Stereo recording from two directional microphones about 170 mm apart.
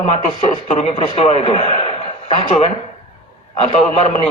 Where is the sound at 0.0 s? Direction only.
35° left (ahead or behind).